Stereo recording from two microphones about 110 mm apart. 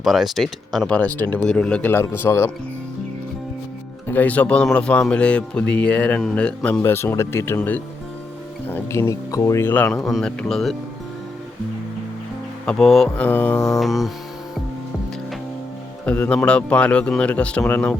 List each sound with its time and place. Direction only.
0.0 s speech: centre (ahead or behind)
0.9 s speech: 15° left (ahead or behind)
1.9 s speech: 20° left (ahead or behind)
4.1 s speech: 15° left (ahead or behind)
6.8 s speech: 20° left (ahead or behind)
10.0 s speech: centre (ahead or behind)
12.6 s speech: 5° left (ahead or behind)
13.2 s speech: 15° left (ahead or behind)
13.7 s speech: centre (ahead or behind)
16.0 s speech: 10° left (ahead or behind)